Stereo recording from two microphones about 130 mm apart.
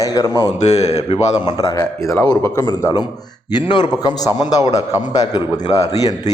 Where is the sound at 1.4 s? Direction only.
30° left (ahead or behind).